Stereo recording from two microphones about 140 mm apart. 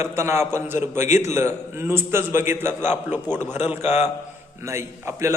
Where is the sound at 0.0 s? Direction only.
20° right (ahead or behind).